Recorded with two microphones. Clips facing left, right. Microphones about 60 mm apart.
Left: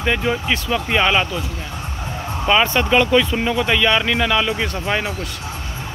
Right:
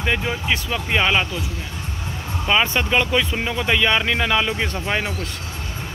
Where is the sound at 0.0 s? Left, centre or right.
Centre.